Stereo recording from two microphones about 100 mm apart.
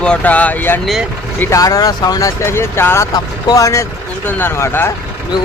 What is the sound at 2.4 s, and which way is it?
Speech, 25° left (ahead or behind).